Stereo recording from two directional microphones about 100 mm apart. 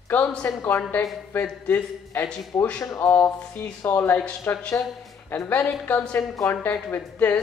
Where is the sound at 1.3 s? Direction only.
20° left (ahead or behind).